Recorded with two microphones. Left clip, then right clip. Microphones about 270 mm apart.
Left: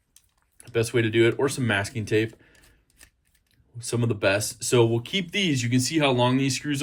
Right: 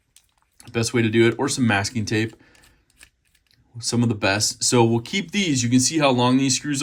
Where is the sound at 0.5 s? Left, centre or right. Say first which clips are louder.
Right 1 dB; centre.